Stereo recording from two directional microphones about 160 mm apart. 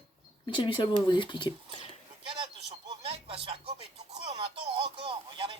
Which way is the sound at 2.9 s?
40° right (ahead or behind).